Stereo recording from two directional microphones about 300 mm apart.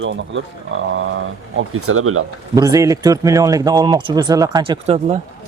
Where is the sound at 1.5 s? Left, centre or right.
Right.